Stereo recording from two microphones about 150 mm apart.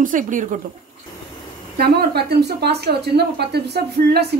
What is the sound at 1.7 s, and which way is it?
A woman's voice, 90° right.